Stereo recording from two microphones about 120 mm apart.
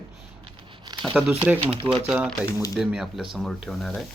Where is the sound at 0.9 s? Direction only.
35° right (ahead or behind).